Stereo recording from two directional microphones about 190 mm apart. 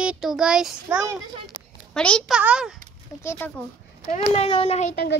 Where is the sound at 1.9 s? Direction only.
5° left (ahead or behind).